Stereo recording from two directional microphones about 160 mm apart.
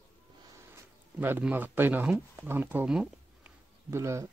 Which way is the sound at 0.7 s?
15° right (ahead or behind).